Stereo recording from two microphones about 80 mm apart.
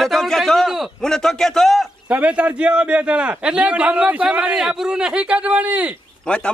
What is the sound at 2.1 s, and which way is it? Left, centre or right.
A man's voice, centre.